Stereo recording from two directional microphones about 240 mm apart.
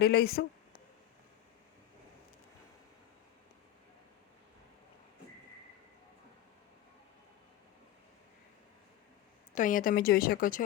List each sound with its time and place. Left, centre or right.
0.0 s a woman's voice: left
9.6 s a woman's voice: left